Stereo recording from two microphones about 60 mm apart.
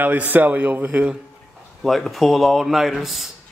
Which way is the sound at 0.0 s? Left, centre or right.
Right.